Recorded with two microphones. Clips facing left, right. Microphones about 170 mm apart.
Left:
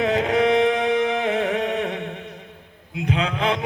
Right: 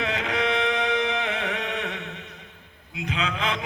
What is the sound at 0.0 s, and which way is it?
Music, 45° left (ahead or behind).